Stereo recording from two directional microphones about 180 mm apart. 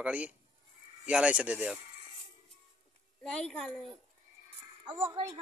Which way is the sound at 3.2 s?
5° left (ahead or behind).